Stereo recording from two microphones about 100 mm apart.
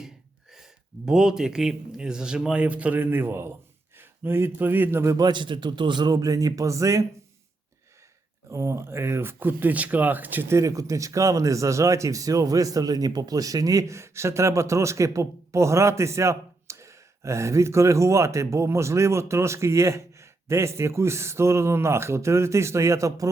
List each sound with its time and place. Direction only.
0.5 s speech: 5° right (ahead or behind); by 5.1 s 25° right (ahead or behind)
5.1 s a man's voice: 45° right (ahead or behind)
8.4 s speech: 30° right (ahead or behind)
10.6 s speech: 35° right (ahead or behind)